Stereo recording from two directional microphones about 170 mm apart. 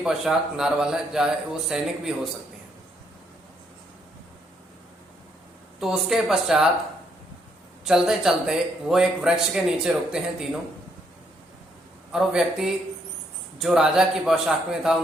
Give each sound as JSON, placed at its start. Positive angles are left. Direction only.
{"t": 0.0, "sound": "speech", "side_deg": -5}
{"t": 5.8, "sound": "speech", "side_deg": 0}
{"t": 7.9, "sound": "speech", "side_deg": -5}
{"t": 12.1, "sound": "speech", "side_deg": -5}